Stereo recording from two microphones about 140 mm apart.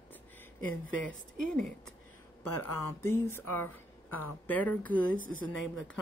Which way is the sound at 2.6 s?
15° left (ahead or behind).